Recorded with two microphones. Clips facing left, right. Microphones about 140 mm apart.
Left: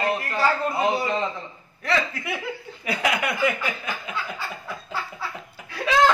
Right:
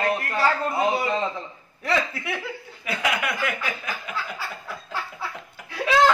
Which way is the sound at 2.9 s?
30° left (ahead or behind).